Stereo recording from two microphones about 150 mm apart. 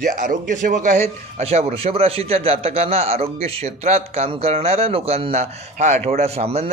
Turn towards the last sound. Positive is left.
turn(degrees=-45)  # may be behind; listen again after turning